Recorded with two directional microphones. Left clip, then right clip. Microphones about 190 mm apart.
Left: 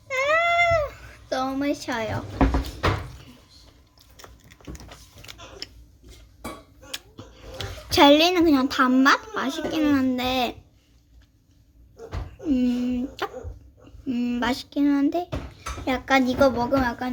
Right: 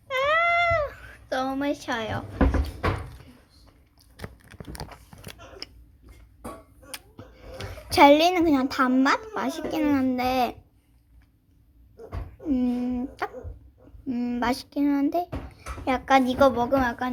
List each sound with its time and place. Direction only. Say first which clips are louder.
0.1 s cat: left 1 dB; 5° left (ahead or behind)
6.9 s speech: left 5 dB; 15° left (ahead or behind)
12.5 s a sound: left 2 dB; 25° left (ahead or behind)
14.1 s a child's voice: left 1 dB; 25° left (ahead or behind); by 17.1 s 10° left (ahead or behind)